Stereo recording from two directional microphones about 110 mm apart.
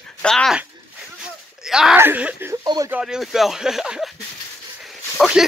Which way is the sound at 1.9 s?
15° right (ahead or behind).